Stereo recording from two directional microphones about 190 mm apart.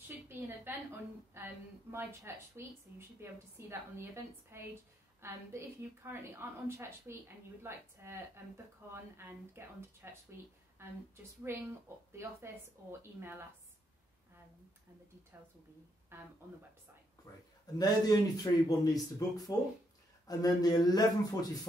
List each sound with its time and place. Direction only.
0.1 s a sound: 10° right (ahead or behind)
1.3 s a woman's voice: 10° right (ahead or behind)
15.3 s a woman's voice: 10° right (ahead or behind)
17.3 s speech: 15° left (ahead or behind)